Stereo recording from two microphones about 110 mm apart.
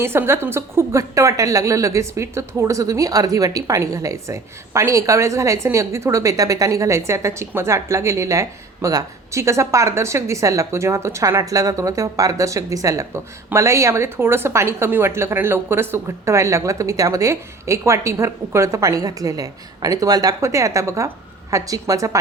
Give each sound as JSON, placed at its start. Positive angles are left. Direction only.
{"t": 0.0, "sound": "a woman's voice", "side_deg": -20}